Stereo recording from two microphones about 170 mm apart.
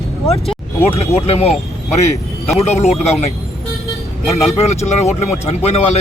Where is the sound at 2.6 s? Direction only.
40° left (ahead or behind).